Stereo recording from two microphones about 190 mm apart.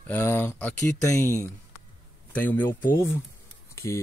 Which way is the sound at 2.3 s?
10° left (ahead or behind).